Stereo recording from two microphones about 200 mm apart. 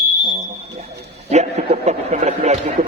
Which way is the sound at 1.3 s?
35° right (ahead or behind).